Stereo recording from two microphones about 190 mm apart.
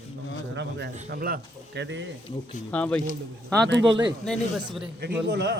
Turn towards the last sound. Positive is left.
turn(degrees=-65)  # may be behind; listen again after turning